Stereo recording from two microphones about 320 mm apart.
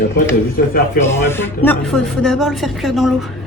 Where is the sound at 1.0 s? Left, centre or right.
Centre.